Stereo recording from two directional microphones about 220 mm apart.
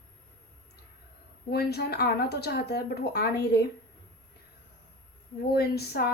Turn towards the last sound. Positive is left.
turn(degrees=45)  # may be behind; listen again after turning